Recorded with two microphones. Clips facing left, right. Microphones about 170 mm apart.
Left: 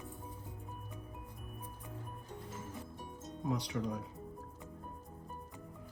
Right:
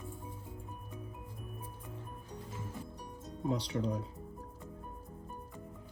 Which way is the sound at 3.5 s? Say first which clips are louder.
Right 3 dB; 35° right (ahead or behind).